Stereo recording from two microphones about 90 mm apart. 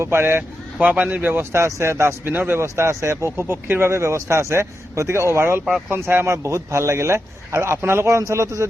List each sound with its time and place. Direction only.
0.0 s speech: 25° right (ahead or behind)